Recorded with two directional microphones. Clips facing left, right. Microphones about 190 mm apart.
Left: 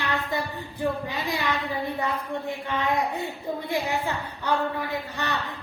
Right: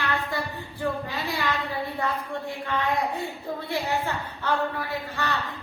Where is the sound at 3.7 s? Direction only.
15° left (ahead or behind).